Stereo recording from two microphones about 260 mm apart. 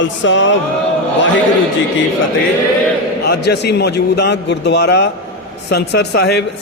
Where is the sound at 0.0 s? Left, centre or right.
Left.